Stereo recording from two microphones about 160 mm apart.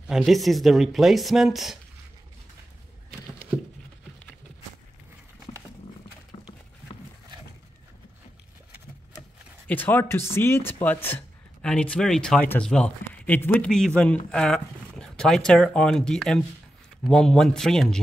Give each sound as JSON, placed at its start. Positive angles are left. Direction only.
{"t": 0.0, "sound": "speech", "side_deg": -5}
{"t": 6.3, "sound": "a sound", "side_deg": 35}
{"t": 9.7, "sound": "speech", "side_deg": 10}